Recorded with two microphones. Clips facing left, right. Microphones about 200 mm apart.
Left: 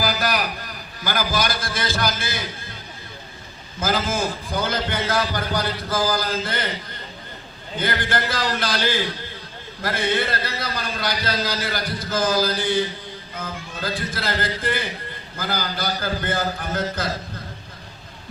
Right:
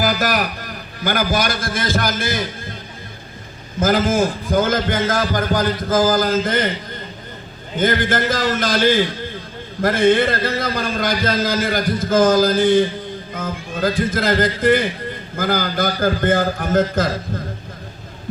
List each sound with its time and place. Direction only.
0.0 s a sound: 50° right (ahead or behind)
1.0 s a man's voice: 50° right (ahead or behind)
3.8 s a man's voice: 50° right (ahead or behind)
7.8 s a man's voice: 45° right (ahead or behind)